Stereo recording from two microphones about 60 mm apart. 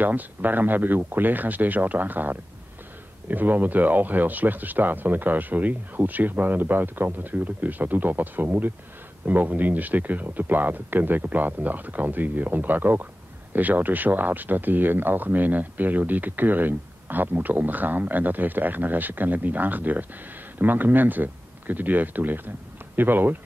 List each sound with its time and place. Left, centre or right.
0.0 s speech: right